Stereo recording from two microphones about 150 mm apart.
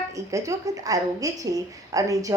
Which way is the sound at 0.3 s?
20° right (ahead or behind).